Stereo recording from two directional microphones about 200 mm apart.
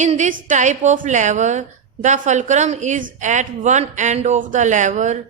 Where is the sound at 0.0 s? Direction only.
35° right (ahead or behind).